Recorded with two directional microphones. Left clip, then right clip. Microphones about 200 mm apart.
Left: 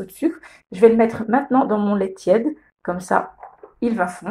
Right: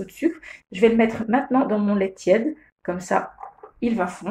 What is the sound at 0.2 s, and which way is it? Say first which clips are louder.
Speech: left 1 dB; 20° left (ahead or behind).